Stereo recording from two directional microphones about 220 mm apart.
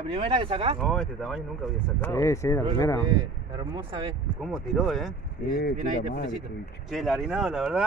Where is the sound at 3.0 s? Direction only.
20° right (ahead or behind).